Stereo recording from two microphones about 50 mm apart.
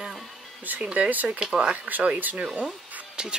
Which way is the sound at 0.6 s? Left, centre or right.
Right.